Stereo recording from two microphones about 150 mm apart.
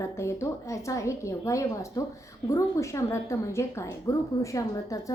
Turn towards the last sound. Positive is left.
turn(degrees=20)  # may be behind; listen again after turning